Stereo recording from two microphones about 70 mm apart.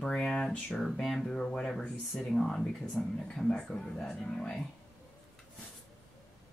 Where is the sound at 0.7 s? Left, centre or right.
Centre.